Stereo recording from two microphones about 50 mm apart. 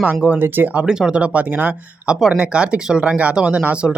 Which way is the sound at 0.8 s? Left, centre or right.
Centre.